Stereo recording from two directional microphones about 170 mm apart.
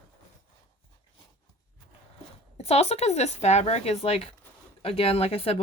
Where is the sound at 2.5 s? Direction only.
35° left (ahead or behind).